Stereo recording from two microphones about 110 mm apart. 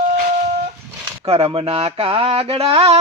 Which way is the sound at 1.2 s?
60° right (ahead or behind).